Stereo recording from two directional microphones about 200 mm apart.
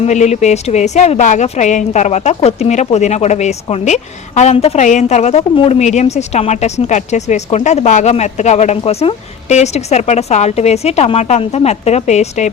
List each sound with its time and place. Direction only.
0.0 s speech: 35° left (ahead or behind)